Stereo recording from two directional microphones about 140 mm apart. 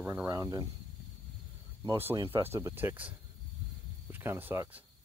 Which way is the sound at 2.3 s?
15° right (ahead or behind).